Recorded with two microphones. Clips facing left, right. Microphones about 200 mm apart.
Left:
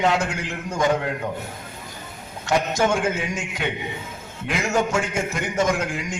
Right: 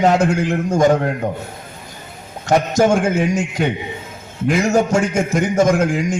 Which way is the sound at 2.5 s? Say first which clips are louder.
Right 6 dB; 45° right (ahead or behind).